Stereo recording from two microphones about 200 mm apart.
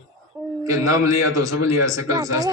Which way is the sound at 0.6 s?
15° right (ahead or behind).